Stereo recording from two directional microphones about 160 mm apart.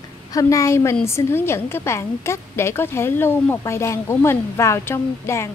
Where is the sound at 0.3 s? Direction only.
20° left (ahead or behind).